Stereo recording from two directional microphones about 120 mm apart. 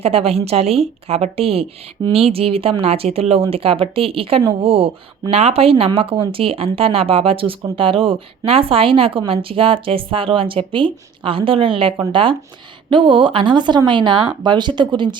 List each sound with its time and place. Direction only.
0.0 s a woman's voice: 55° right (ahead or behind)
2.0 s speech: 30° right (ahead or behind)
2.3 s speech: 55° right (ahead or behind)